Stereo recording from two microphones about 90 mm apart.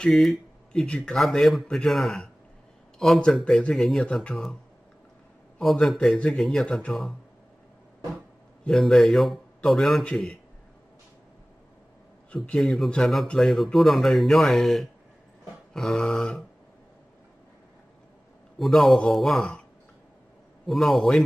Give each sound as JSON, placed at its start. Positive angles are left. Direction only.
{"t": 0.0, "sound": "speech", "side_deg": 0}
{"t": 5.6, "sound": "speech", "side_deg": 0}
{"t": 8.6, "sound": "speech", "side_deg": 0}
{"t": 12.4, "sound": "speech", "side_deg": 5}
{"t": 18.6, "sound": "speech", "side_deg": 0}
{"t": 20.6, "sound": "speech", "side_deg": 0}